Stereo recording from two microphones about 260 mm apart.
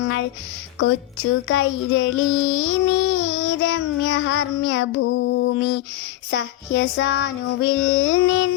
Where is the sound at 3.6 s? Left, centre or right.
Left.